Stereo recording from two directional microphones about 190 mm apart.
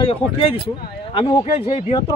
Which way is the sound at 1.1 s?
20° left (ahead or behind).